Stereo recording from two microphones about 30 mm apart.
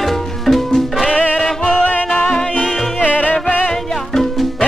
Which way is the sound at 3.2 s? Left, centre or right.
Left.